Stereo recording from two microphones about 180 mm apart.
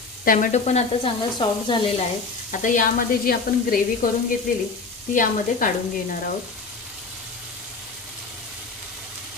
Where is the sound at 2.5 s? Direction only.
45° left (ahead or behind).